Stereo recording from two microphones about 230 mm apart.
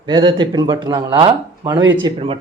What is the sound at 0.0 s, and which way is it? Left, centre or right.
Speech, centre.